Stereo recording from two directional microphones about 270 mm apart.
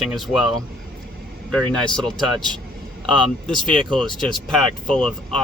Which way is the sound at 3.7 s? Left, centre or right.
Centre.